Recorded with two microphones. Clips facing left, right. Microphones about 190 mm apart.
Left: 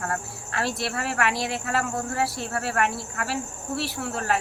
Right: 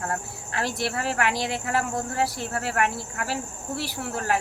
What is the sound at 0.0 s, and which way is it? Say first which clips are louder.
A woman's voice: even; 20° right (ahead or behind).